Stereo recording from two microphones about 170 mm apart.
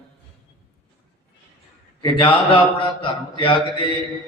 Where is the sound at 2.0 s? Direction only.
30° left (ahead or behind).